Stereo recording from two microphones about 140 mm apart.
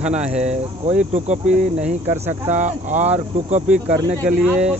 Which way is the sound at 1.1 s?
55° right (ahead or behind).